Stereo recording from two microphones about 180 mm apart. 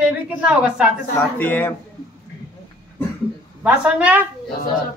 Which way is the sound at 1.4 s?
10° left (ahead or behind).